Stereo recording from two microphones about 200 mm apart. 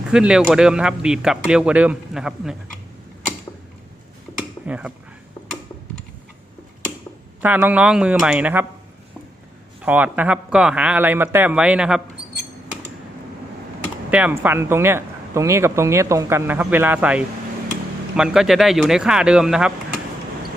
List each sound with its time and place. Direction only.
0.1 s speech: 5° right (ahead or behind)
4.6 s speech: 5° right (ahead or behind)
7.4 s speech: 10° right (ahead or behind)
9.8 s speech: 10° right (ahead or behind)
14.1 s speech: 10° right (ahead or behind)